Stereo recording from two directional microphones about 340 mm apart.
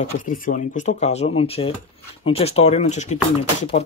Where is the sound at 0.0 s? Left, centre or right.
Left.